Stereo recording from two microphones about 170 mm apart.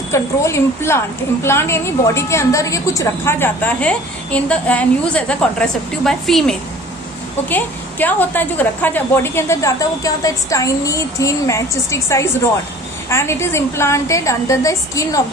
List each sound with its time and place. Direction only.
0.1 s a woman's voice: 15° left (ahead or behind)